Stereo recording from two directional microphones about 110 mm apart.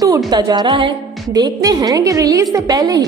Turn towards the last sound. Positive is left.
turn(degrees=-35)  # may be behind; listen again after turning